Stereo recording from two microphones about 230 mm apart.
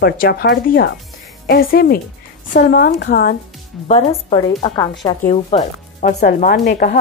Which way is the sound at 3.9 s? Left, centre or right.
Left.